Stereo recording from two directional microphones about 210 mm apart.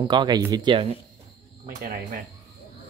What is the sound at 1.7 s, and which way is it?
Speech, 35° right (ahead or behind).